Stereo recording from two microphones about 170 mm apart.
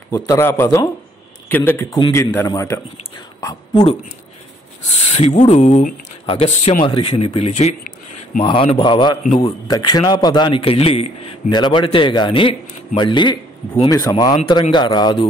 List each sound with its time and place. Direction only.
0.1 s speech: 15° left (ahead or behind)
4.9 s a man's voice: 40° left (ahead or behind)